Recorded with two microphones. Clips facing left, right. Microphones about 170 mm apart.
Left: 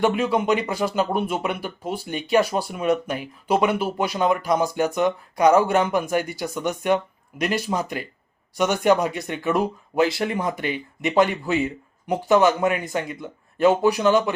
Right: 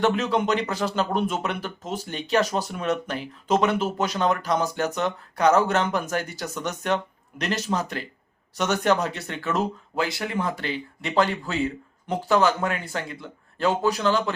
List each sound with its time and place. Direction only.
0.0 s a man's voice: 10° left (ahead or behind)